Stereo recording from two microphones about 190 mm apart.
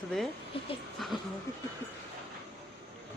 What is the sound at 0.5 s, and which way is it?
Speech, 30° left (ahead or behind).